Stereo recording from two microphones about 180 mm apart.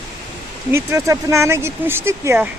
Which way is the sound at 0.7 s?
15° right (ahead or behind).